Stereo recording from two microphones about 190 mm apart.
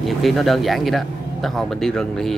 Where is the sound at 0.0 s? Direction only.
Centre (ahead or behind).